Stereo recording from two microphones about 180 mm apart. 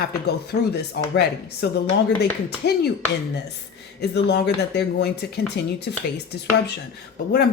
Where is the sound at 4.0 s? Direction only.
65° left (ahead or behind).